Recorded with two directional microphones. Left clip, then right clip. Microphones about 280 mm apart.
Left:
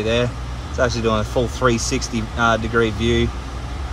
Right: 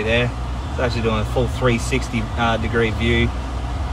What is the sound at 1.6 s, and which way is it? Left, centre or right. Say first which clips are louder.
Speech: left 2 dB; centre.